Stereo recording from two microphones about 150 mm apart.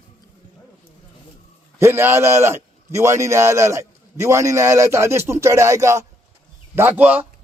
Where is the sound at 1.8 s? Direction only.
15° right (ahead or behind).